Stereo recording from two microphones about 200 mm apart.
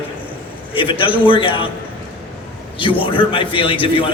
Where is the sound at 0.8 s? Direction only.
25° left (ahead or behind).